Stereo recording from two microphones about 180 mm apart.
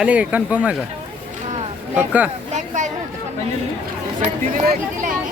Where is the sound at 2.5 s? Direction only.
45° right (ahead or behind).